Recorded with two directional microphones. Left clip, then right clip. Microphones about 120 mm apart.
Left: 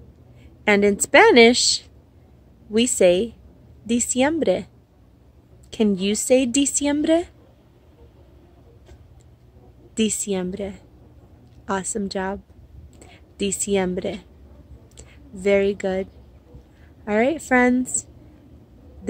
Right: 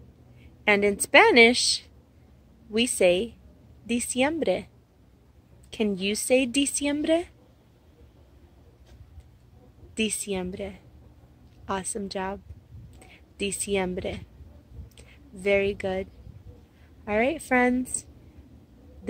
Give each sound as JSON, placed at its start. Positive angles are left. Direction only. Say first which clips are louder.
{"t": 0.4, "sound": "a woman's voice", "louder": "left 4 dB", "side_deg": 35}
{"t": 5.7, "sound": "a woman's voice", "louder": "left 5 dB", "side_deg": 40}
{"t": 9.9, "sound": "a woman's voice", "louder": "left 5 dB", "side_deg": 40}